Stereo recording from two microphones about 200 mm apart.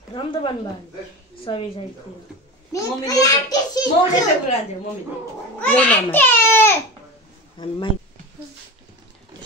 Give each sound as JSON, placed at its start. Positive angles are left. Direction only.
{"t": 0.1, "sound": "a woman's voice", "side_deg": 25}
{"t": 2.7, "sound": "a child's voice", "side_deg": 15}
{"t": 5.6, "sound": "speech", "side_deg": 5}
{"t": 7.5, "sound": "a woman's voice", "side_deg": 25}